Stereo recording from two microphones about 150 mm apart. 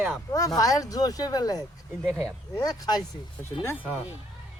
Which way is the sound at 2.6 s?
25° left (ahead or behind).